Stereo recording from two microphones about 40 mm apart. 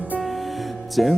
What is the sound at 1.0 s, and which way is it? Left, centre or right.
Music, centre.